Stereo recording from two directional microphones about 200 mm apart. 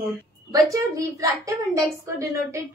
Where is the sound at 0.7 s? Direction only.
15° right (ahead or behind).